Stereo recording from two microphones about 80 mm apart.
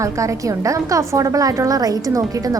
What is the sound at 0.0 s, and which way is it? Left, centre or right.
A woman's voice, right.